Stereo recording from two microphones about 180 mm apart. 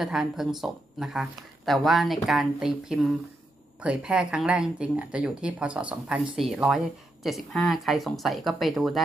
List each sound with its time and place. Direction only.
0.0 s speech: centre (ahead or behind)